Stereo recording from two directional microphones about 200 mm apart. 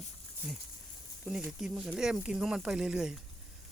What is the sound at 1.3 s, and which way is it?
Speech, 5° right (ahead or behind).